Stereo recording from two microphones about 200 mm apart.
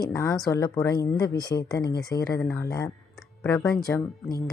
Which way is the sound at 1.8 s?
50° left (ahead or behind).